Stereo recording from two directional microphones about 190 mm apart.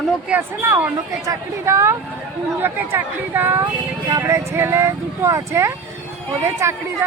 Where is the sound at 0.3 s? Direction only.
10° right (ahead or behind).